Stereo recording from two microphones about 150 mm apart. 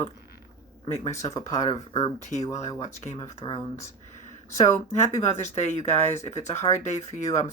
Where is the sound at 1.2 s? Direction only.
20° left (ahead or behind).